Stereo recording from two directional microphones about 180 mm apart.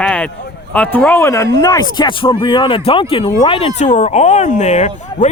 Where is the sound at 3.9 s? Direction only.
45° left (ahead or behind).